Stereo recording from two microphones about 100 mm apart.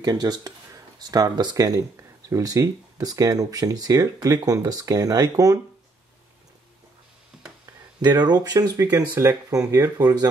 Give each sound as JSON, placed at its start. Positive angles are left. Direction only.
{"t": 0.0, "sound": "speech", "side_deg": -40}
{"t": 8.0, "sound": "speech", "side_deg": -45}
{"t": 9.1, "sound": "speech", "side_deg": -25}